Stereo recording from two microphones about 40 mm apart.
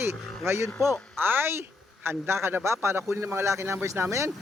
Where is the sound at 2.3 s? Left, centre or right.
Right.